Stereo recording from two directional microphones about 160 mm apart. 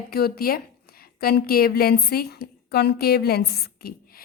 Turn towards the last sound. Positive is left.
turn(degrees=80)